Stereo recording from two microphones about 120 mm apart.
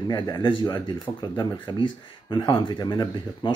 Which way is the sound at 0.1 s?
40° left (ahead or behind).